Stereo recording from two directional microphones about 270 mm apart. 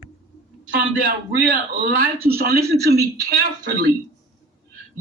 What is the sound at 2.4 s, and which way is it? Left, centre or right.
Speech, right.